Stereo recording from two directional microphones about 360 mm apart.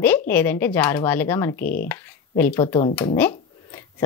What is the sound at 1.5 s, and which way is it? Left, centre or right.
Speech, left.